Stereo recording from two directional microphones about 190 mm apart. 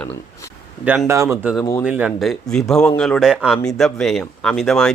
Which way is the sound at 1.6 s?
15° left (ahead or behind).